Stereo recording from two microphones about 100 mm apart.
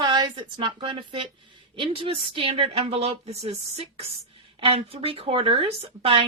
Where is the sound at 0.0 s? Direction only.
50° right (ahead or behind); by 4.1 s 90° right.